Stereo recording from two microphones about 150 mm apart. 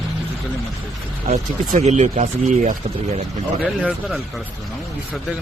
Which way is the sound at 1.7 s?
55° right (ahead or behind).